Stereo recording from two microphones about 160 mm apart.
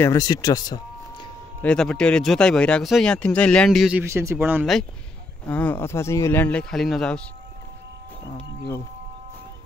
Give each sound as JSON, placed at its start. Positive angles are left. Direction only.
{"t": 0.0, "sound": "speech", "side_deg": 20}
{"t": 1.6, "sound": "speech", "side_deg": 5}
{"t": 4.0, "sound": "speech", "side_deg": -15}
{"t": 5.5, "sound": "speech", "side_deg": 10}